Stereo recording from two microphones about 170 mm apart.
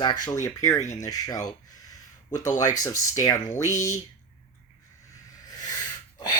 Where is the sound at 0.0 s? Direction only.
20° left (ahead or behind).